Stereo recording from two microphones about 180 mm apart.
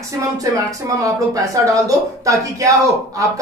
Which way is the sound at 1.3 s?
20° right (ahead or behind).